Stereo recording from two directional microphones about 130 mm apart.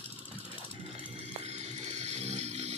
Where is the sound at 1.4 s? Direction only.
60° right (ahead or behind).